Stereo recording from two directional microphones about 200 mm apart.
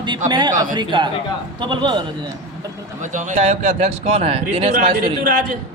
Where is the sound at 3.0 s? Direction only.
40° right (ahead or behind).